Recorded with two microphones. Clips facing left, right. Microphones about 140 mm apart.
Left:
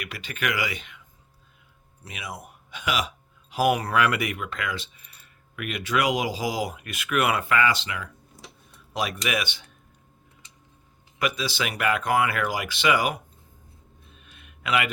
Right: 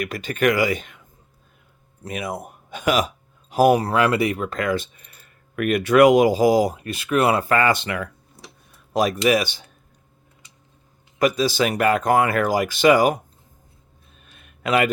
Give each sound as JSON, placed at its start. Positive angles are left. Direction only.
{"t": 0.0, "sound": "speech", "side_deg": -45}
{"t": 2.0, "sound": "speech", "side_deg": -50}
{"t": 8.7, "sound": "speech", "side_deg": -40}
{"t": 11.2, "sound": "speech", "side_deg": -40}
{"t": 14.2, "sound": "a sound", "side_deg": -40}